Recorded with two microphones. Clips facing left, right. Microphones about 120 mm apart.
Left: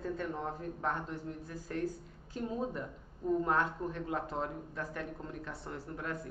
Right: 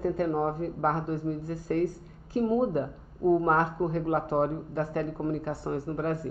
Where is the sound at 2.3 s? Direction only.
50° right (ahead or behind).